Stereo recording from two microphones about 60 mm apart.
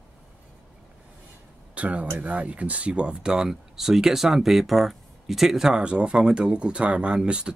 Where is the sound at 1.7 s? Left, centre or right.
Right.